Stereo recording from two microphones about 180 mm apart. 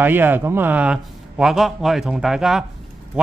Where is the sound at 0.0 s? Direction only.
10° right (ahead or behind).